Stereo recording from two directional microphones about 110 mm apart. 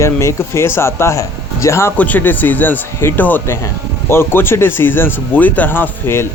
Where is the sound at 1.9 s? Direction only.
15° left (ahead or behind).